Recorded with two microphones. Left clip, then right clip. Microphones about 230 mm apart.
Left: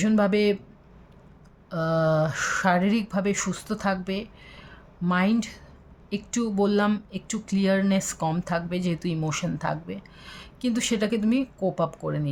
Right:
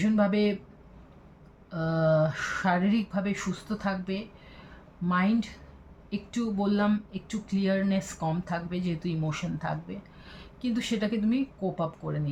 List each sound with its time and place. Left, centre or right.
0.0 s speech: left
1.7 s speech: left